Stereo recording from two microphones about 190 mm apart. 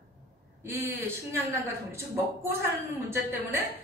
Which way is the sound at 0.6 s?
15° right (ahead or behind).